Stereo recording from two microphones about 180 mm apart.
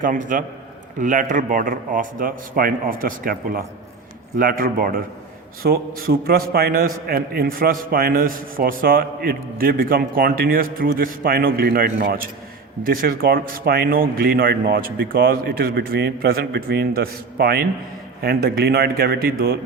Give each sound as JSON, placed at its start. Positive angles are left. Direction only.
{"t": 0.0, "sound": "a man's voice", "side_deg": -45}